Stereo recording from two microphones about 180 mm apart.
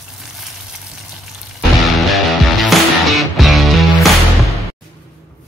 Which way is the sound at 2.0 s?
Centre (ahead or behind).